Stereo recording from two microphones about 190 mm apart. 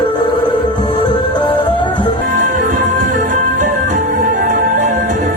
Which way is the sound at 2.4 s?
45° right (ahead or behind).